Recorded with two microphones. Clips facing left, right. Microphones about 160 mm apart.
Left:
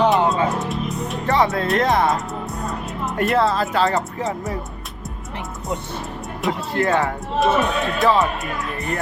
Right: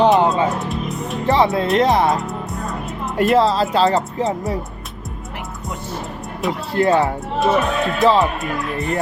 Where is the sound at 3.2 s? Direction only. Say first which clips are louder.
Right 4 dB; 20° right (ahead or behind).